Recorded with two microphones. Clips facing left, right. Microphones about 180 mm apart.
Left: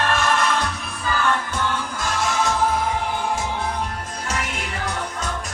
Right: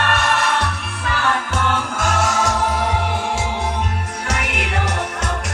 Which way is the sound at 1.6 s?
80° right.